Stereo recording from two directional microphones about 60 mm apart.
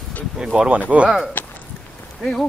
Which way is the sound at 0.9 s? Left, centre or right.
Right.